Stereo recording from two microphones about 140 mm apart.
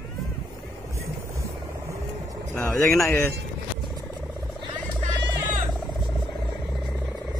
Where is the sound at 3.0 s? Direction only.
20° left (ahead or behind).